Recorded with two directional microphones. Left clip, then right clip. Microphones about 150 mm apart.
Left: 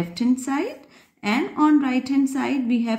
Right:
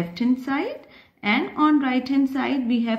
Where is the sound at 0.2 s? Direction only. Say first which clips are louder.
Left 1 dB; 35° left (ahead or behind).